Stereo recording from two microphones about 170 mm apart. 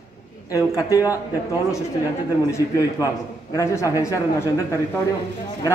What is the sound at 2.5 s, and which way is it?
A man's voice, 15° left (ahead or behind).